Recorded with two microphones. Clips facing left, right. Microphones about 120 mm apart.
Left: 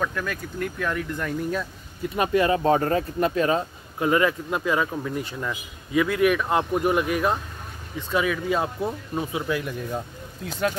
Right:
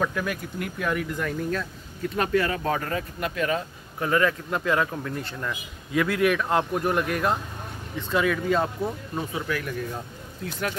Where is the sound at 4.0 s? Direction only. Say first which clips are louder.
Left 2 dB; 15° left (ahead or behind).